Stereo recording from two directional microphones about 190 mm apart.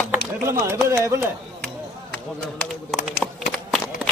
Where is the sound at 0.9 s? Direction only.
15° right (ahead or behind).